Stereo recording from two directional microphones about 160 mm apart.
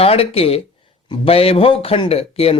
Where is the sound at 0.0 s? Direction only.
40° left (ahead or behind).